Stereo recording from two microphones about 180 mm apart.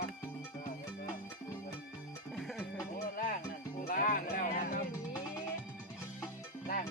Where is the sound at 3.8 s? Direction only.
50° left (ahead or behind).